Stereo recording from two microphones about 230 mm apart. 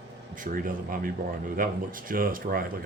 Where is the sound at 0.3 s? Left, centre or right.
Right.